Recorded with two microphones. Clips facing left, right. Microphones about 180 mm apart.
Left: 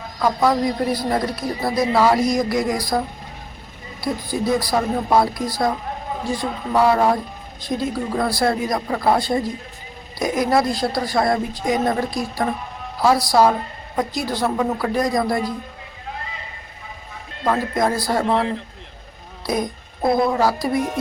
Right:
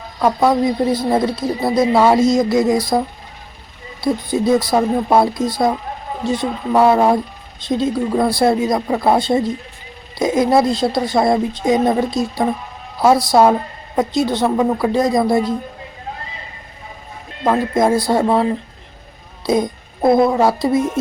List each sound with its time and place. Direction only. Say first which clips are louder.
0.2 s a man's voice: right 4 dB; 25° right (ahead or behind)
4.0 s a man's voice: right 6 dB; 25° right (ahead or behind)
17.4 s a man's voice: right 5 dB; 20° right (ahead or behind)
19.5 s a man's voice: right 6 dB; 25° right (ahead or behind)